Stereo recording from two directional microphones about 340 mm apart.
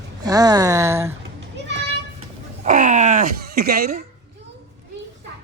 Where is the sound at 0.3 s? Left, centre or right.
Centre.